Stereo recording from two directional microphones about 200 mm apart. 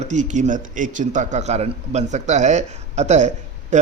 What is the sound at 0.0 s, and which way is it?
Speech, 35° right (ahead or behind).